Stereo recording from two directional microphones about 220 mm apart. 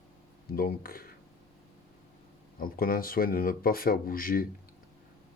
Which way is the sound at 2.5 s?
40° left (ahead or behind).